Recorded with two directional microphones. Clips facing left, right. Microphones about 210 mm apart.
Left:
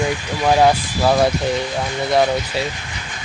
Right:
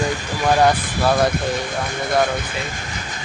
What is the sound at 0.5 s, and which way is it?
Speech, 10° left (ahead or behind).